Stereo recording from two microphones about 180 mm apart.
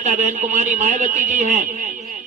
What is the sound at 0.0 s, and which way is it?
A man's voice, 40° right (ahead or behind).